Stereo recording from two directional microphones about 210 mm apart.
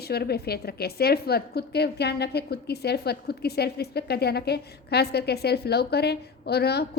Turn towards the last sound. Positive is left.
turn(degrees=50)  # may be behind; listen again after turning